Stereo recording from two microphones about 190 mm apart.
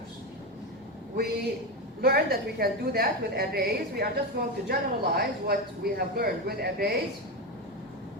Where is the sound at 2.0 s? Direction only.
55° right (ahead or behind).